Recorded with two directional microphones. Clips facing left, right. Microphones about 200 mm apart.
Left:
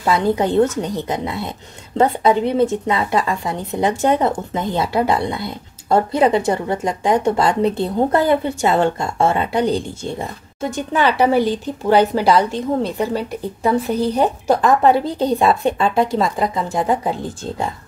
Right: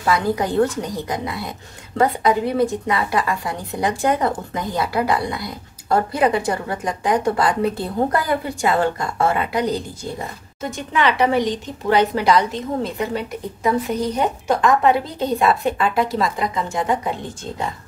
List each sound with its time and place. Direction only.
0.0 s a woman's voice: 25° left (ahead or behind)
11.3 s a woman's voice: 5° left (ahead or behind)
11.9 s speech: 30° left (ahead or behind)
12.4 s a woman's voice: centre (ahead or behind)
12.9 s speech: 35° left (ahead or behind)